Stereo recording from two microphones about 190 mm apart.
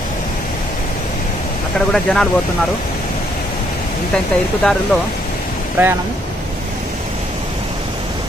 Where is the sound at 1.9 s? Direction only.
5° left (ahead or behind).